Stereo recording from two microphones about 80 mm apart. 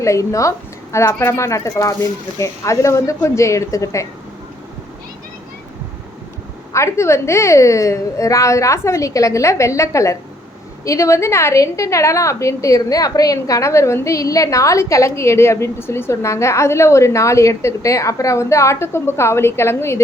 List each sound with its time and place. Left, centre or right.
0.0 s a woman's voice: left
6.7 s a woman's voice: left